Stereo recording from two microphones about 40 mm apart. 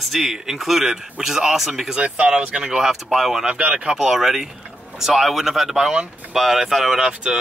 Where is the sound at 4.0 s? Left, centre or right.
Centre.